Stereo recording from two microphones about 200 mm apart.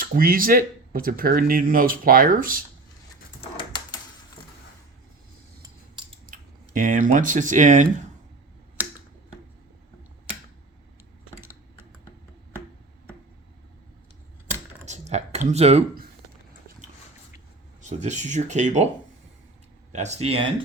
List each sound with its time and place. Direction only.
0.0 s speech: 45° right (ahead or behind)
3.4 s typewriter: 25° left (ahead or behind)
6.2 s speech: 40° right (ahead or behind)
14.8 s a sound: 35° right (ahead or behind)
17.8 s speech: 35° right (ahead or behind)
19.9 s speech: 35° right (ahead or behind)